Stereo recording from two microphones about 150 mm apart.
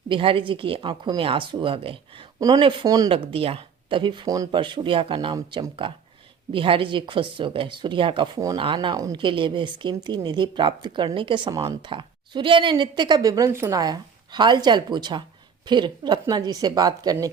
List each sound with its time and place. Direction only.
0.1 s a woman's voice: 35° right (ahead or behind)
3.2 s a woman's voice: 40° right (ahead or behind)